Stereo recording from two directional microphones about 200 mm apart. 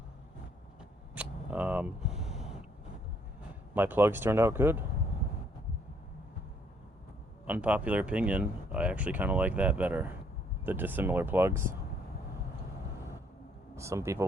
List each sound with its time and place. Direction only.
1.1 s a sound: 5° right (ahead or behind)
3.8 s speech: 10° right (ahead or behind)
7.4 s speech: 10° right (ahead or behind)
13.7 s speech: 15° right (ahead or behind)